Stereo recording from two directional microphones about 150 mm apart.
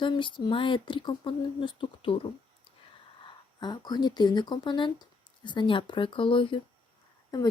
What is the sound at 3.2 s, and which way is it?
Speech, 30° left (ahead or behind).